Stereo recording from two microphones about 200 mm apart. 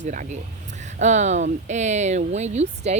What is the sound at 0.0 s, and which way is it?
Speech, 40° right (ahead or behind).